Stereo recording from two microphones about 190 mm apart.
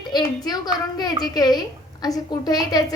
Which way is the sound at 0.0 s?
20° left (ahead or behind).